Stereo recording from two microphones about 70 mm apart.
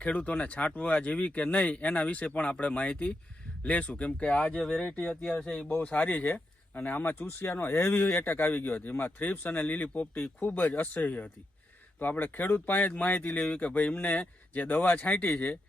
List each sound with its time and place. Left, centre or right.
0.0 s speech: left
5.5 s speech: centre
7.2 s speech: left